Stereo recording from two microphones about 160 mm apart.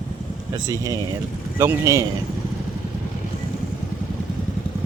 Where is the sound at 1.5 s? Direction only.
15° right (ahead or behind).